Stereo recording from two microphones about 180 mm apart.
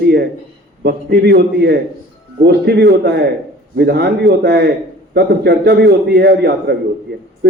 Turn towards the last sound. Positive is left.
turn(degrees=-65)  # may be behind; listen again after turning